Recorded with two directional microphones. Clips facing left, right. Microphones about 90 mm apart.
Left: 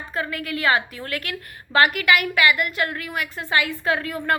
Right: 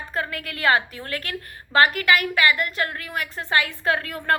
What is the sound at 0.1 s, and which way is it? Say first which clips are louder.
A woman's voice: left 2 dB; 40° right (ahead or behind).